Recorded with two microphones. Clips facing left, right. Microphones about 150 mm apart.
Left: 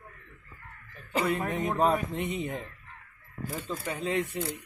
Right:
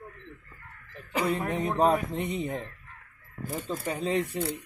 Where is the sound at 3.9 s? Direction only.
30° right (ahead or behind).